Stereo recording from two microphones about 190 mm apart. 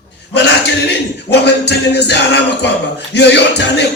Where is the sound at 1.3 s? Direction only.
65° left (ahead or behind).